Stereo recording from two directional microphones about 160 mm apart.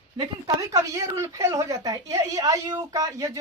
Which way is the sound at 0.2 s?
25° right (ahead or behind).